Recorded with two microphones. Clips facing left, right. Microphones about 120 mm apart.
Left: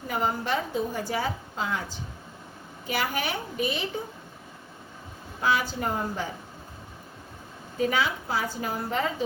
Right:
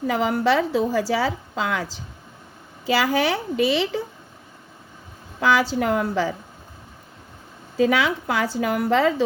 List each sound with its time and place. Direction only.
0.1 s a woman's voice: 90° right
5.4 s a woman's voice: 90° right
7.8 s a woman's voice: 90° right